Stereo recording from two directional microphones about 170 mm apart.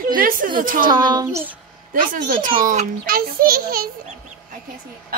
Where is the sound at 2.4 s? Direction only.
50° right (ahead or behind).